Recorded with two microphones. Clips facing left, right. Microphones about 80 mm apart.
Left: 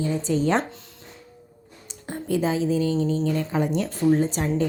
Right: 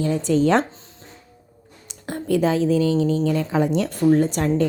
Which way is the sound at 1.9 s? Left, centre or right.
Right.